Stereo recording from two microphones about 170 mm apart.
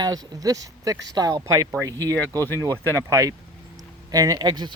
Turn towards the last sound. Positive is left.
turn(degrees=-25)  # may be behind; listen again after turning